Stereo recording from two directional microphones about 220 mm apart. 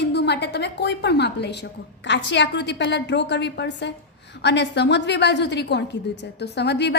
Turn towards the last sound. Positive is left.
turn(degrees=50)  # may be behind; listen again after turning